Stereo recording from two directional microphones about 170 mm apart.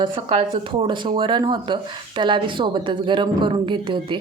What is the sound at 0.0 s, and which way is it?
A woman's voice, 30° right (ahead or behind).